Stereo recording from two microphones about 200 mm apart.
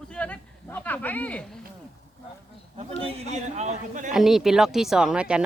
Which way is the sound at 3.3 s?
35° right (ahead or behind).